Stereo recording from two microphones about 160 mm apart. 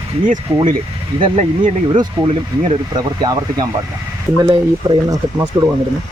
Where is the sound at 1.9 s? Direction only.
30° right (ahead or behind).